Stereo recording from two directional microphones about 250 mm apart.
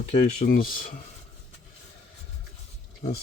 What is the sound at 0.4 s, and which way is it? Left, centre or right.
Speech, left.